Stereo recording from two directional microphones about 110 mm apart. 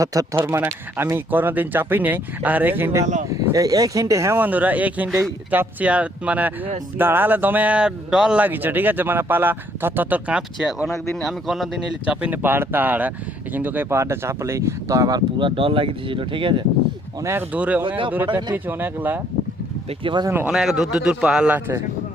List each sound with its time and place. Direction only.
0.0 s speech: 30° right (ahead or behind)
0.3 s speech: 20° right (ahead or behind)
8.4 s speech: 15° right (ahead or behind)
10.8 s a man's voice: 5° left (ahead or behind)
12.0 s speech: 15° right (ahead or behind); by 15.2 s 30° right (ahead or behind)
15.4 s speech: 50° right (ahead or behind)
17.5 s speech: 15° right (ahead or behind)
17.8 s speech: 50° right (ahead or behind)
18.3 s speech: 40° right (ahead or behind)
18.5 s speech: 15° right (ahead or behind)
20.5 s speech: 5° right (ahead or behind)